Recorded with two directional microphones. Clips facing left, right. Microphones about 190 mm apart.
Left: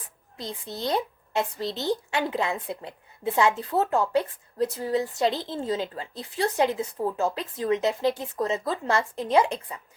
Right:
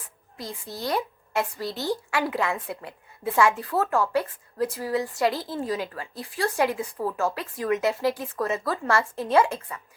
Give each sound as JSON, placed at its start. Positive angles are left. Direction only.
{"t": 0.3, "sound": "speech", "side_deg": 20}